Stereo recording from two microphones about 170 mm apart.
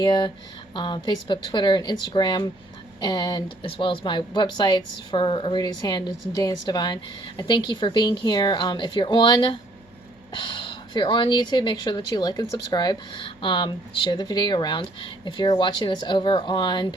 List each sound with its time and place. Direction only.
0.0 s speech: 25° left (ahead or behind)